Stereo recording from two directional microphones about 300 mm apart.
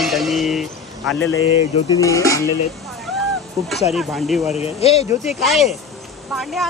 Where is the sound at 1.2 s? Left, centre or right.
Left.